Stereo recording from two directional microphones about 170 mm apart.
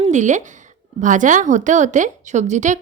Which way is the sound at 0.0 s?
45° right (ahead or behind).